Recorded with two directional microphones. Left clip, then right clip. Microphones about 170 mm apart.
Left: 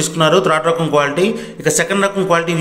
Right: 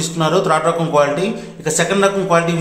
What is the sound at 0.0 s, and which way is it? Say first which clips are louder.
A man's voice: left 4 dB; 15° left (ahead or behind).